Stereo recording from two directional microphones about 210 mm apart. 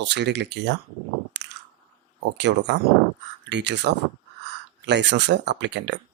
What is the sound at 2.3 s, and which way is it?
Speech, 55° right (ahead or behind).